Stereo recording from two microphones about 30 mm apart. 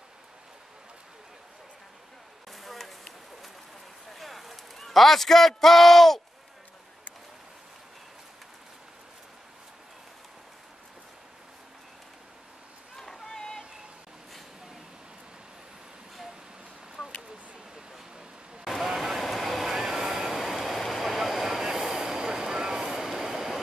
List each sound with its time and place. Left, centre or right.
2.5 s a sound: centre
4.1 s fire: centre
4.8 s a man's voice: centre
12.9 s boat: centre
18.6 s vehicle: centre
20.3 s vehicle: centre